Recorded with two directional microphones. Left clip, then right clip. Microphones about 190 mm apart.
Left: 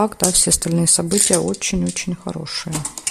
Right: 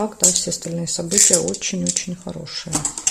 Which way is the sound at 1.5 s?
30° left (ahead or behind).